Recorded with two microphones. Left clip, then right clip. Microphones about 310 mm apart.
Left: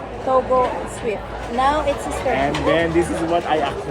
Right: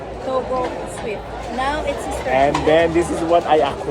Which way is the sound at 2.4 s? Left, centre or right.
Centre.